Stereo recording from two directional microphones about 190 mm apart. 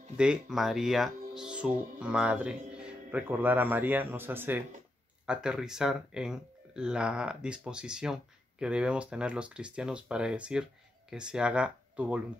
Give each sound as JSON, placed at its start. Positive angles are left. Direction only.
{"t": 0.2, "sound": "speech", "side_deg": -5}